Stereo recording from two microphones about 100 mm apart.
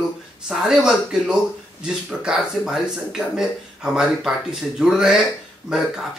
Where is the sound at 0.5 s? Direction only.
5° right (ahead or behind).